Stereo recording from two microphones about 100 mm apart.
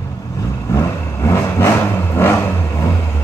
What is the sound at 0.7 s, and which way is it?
Vehicle, 30° left (ahead or behind).